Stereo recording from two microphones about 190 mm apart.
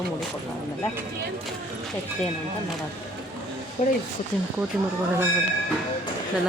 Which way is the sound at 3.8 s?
35° left (ahead or behind).